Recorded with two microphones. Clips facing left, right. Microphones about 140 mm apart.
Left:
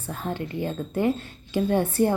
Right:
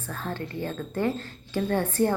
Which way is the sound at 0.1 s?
15° left (ahead or behind).